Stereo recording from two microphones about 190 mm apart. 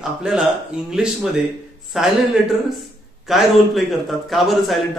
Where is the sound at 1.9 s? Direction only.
Centre (ahead or behind).